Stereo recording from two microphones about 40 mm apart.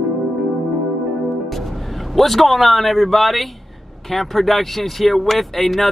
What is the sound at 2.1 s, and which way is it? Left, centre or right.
Speech, centre.